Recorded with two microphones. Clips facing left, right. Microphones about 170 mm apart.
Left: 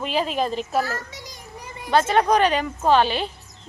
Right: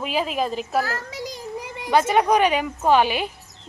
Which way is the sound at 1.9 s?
10° right (ahead or behind).